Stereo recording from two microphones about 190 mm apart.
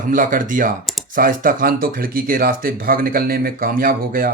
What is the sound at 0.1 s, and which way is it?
Speech, 45° right (ahead or behind).